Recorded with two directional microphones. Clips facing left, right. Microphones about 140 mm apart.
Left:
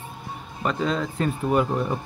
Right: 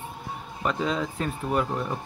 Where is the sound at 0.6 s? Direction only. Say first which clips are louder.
Left 2 dB; 10° right (ahead or behind).